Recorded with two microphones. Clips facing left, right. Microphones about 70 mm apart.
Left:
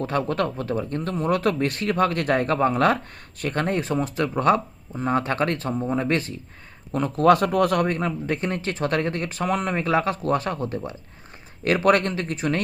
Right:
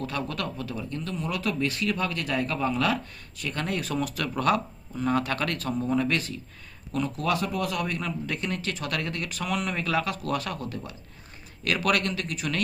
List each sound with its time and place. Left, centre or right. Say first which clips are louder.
0.0 s speech: left 7 dB; left
6.9 s speech: left 9 dB; left